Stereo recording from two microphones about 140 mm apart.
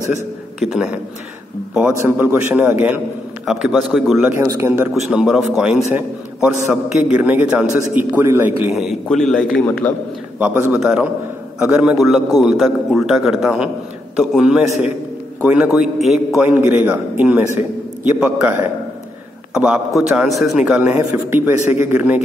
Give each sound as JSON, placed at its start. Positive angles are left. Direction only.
{"t": 0.6, "sound": "a man's voice", "side_deg": -5}
{"t": 4.3, "sound": "speech", "side_deg": -20}
{"t": 5.1, "sound": "a man's voice", "side_deg": -5}
{"t": 5.9, "sound": "a man's voice", "side_deg": -15}
{"t": 8.7, "sound": "a man's voice", "side_deg": 0}
{"t": 10.4, "sound": "a man's voice", "side_deg": -15}
{"t": 16.3, "sound": "a man's voice", "side_deg": -15}